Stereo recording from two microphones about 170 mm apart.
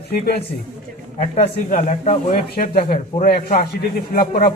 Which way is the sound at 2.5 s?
55° left (ahead or behind).